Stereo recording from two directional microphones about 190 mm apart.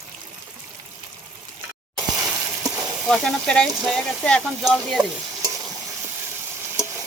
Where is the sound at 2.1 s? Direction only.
20° right (ahead or behind).